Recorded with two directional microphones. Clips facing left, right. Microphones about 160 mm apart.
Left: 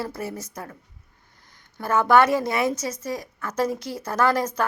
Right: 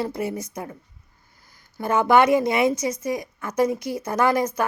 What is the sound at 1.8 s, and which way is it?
A woman's voice, 15° right (ahead or behind).